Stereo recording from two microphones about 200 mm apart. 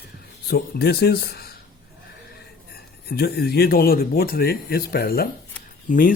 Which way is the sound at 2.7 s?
50° left (ahead or behind).